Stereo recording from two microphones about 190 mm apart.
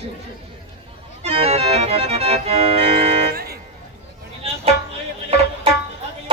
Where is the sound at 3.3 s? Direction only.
55° right (ahead or behind).